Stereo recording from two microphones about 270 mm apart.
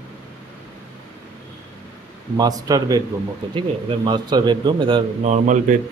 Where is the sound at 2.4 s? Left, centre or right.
Centre.